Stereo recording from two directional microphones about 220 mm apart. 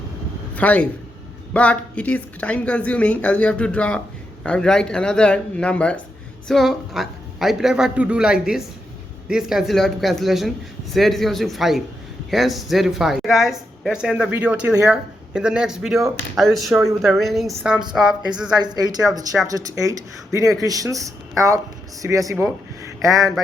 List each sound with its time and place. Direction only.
0.5 s a man's voice: 5° left (ahead or behind)
19.5 s speech: 15° right (ahead or behind)